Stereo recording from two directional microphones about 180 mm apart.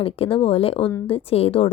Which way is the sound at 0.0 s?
30° left (ahead or behind).